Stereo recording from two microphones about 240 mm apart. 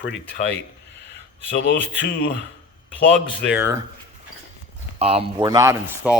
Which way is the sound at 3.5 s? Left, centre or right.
Centre.